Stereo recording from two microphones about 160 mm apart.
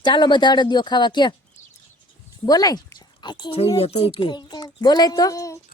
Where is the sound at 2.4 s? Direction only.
25° left (ahead or behind).